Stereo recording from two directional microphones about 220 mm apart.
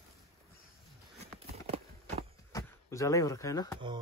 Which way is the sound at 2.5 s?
15° left (ahead or behind).